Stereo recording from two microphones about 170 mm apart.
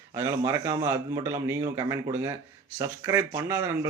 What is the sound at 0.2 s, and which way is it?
Speech, 15° right (ahead or behind).